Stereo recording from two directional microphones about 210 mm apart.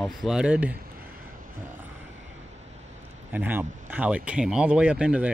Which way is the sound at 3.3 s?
10° right (ahead or behind).